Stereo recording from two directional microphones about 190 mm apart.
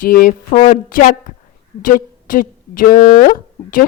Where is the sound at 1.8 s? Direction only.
45° left (ahead or behind).